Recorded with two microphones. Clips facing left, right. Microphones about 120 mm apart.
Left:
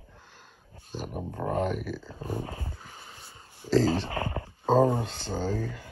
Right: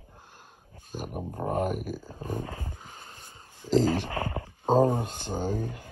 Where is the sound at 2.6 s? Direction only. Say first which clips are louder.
Even; 15° right (ahead or behind).